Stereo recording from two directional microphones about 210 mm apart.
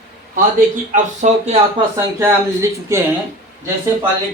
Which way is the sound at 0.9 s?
35° right (ahead or behind).